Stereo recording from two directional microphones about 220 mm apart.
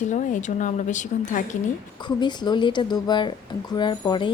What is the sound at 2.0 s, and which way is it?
Speech, 20° left (ahead or behind).